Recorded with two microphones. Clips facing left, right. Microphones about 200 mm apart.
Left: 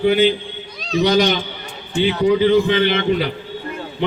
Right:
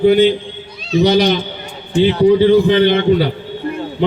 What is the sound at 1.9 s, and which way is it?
A man's voice, 30° right (ahead or behind).